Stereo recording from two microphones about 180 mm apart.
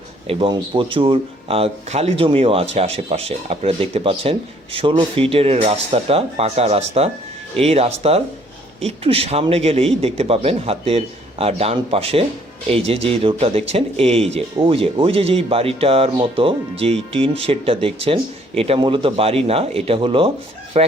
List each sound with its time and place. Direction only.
0.3 s speech: 25° right (ahead or behind)